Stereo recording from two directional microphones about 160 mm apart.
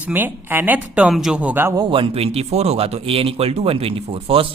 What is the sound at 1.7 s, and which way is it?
A man's voice, 30° right (ahead or behind).